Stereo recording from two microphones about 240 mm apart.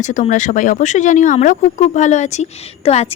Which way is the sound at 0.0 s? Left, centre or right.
Left.